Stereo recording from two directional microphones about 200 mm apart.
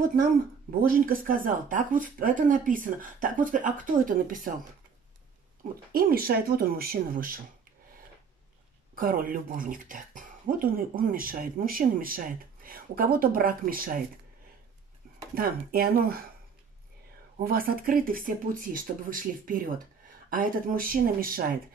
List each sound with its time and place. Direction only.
0.8 s speech: 45° right (ahead or behind)
5.9 s speech: 45° right (ahead or behind)
8.9 s speech: 45° right (ahead or behind)
15.3 s speech: 50° right (ahead or behind)
17.4 s speech: 45° right (ahead or behind)